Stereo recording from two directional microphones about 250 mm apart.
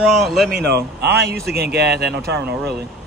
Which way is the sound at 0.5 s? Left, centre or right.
Right.